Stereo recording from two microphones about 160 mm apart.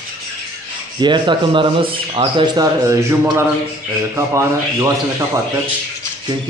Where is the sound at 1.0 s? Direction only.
30° right (ahead or behind).